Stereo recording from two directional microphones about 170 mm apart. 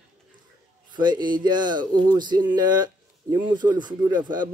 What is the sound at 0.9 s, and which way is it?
Speech, 25° right (ahead or behind).